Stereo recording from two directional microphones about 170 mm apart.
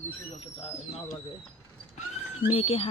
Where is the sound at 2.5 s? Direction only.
35° left (ahead or behind).